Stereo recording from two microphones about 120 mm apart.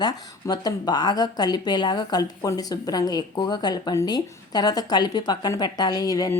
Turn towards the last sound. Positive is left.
turn(degrees=30)  # may be behind; listen again after turning